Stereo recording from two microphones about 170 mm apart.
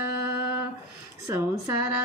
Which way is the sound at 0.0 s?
15° right (ahead or behind).